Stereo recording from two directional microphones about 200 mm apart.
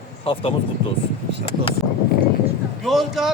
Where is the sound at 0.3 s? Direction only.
30° left (ahead or behind).